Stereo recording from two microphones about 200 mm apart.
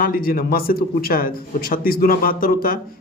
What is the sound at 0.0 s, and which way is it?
Speech, 45° left (ahead or behind).